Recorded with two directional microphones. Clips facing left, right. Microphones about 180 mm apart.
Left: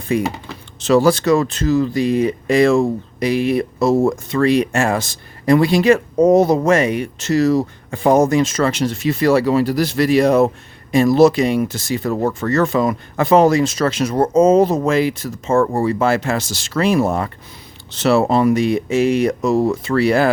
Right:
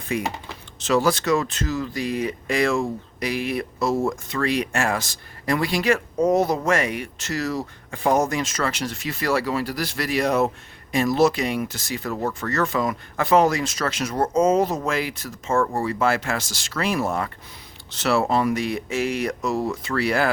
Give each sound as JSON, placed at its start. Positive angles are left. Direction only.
{"t": 0.1, "sound": "speech", "side_deg": 30}